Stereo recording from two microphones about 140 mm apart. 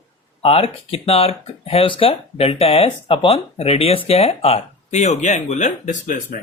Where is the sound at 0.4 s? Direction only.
45° left (ahead or behind); by 6.2 s 65° left (ahead or behind).